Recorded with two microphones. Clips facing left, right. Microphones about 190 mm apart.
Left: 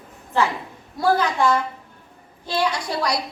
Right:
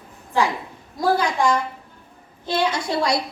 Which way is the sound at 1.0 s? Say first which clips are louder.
Even; 15° right (ahead or behind).